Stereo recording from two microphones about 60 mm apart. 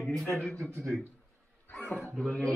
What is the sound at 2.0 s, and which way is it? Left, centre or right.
Speech, centre.